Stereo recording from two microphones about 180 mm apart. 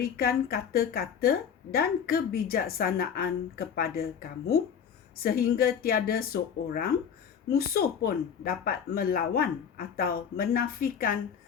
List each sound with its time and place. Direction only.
0.0 s a woman's voice: 60° left (ahead or behind)